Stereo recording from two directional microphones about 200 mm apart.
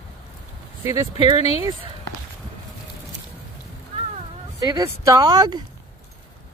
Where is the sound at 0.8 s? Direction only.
15° right (ahead or behind).